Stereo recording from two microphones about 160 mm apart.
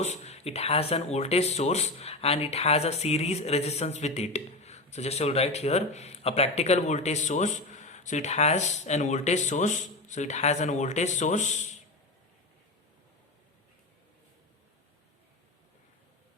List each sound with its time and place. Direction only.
0.0 s speech: 45° left (ahead or behind)